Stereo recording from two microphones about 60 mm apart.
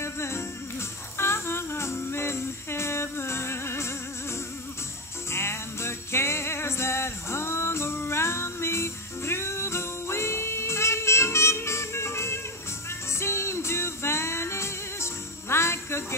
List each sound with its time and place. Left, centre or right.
0.0 s music: left
5.3 s music: left